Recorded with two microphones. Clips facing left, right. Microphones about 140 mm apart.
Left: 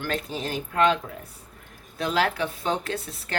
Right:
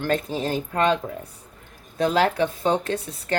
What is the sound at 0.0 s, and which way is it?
Speech, 35° right (ahead or behind).